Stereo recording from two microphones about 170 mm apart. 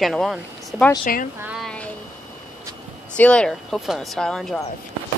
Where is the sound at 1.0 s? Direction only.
55° left (ahead or behind).